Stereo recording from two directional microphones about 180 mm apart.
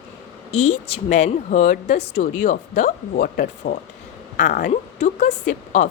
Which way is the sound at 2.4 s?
45° left (ahead or behind).